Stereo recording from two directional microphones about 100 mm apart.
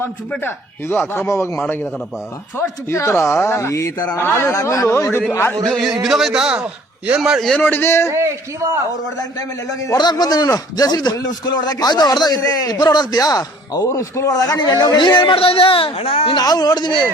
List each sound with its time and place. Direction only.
0.4 s speech: 20° left (ahead or behind)
5.6 s a man's voice: centre (ahead or behind)
7.5 s speech: 20° left (ahead or behind)
8.1 s a man's voice: 30° right (ahead or behind)
9.8 s a man's voice: 40° left (ahead or behind)
15.2 s speech: 60° left (ahead or behind)
16.4 s speech: 40° left (ahead or behind)